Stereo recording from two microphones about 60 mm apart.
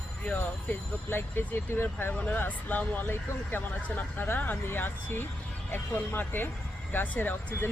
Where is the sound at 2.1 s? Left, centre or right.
Left.